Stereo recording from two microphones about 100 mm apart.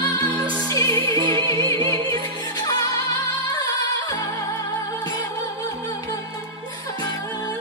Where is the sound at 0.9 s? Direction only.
55° right (ahead or behind).